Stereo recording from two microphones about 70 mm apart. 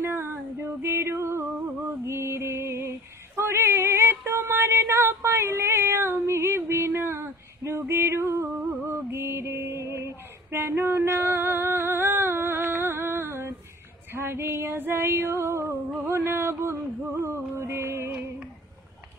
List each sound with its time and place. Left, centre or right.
0.0 s music: right
3.3 s a sound: right
7.9 s music: right
8.8 s mantra: right
14.1 s female singing: right
16.1 s a sound: right
17.1 s music: right